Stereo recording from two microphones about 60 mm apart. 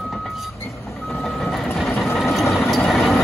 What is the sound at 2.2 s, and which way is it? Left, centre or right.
Train, centre.